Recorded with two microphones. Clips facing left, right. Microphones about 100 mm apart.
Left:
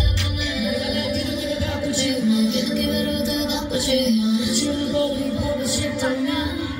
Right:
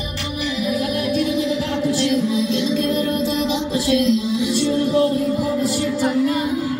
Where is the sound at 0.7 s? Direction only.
45° right (ahead or behind).